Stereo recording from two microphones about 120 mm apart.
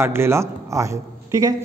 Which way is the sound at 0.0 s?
20° right (ahead or behind).